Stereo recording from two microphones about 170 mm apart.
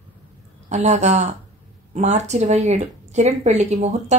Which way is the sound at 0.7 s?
40° right (ahead or behind).